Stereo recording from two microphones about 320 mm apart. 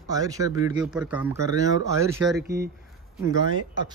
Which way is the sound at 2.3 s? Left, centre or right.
Right.